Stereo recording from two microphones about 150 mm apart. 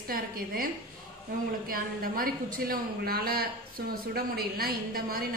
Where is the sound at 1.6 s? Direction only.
75° right (ahead or behind).